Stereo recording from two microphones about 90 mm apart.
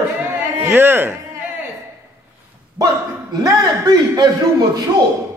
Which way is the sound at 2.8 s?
40° right (ahead or behind).